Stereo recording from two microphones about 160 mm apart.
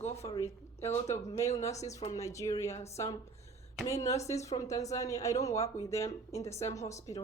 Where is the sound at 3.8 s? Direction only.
20° left (ahead or behind).